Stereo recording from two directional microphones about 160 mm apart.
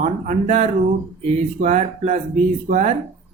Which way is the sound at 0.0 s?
45° right (ahead or behind).